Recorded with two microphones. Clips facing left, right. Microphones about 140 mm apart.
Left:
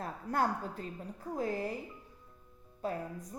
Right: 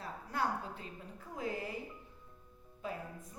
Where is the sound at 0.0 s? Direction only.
45° left (ahead or behind).